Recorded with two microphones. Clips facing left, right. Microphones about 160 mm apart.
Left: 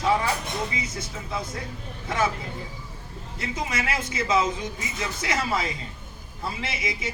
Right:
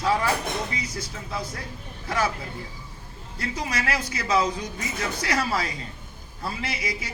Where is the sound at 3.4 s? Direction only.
20° left (ahead or behind).